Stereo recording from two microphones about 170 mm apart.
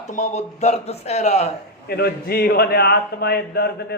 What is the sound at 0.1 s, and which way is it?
A man's voice, 45° left (ahead or behind).